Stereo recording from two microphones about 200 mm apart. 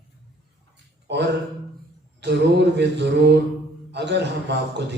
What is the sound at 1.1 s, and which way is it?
A man's voice, 60° right (ahead or behind).